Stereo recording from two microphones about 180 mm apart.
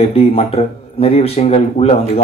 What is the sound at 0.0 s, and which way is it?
Speech, 35° left (ahead or behind).